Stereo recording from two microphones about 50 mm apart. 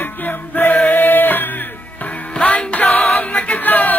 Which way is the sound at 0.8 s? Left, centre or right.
Left.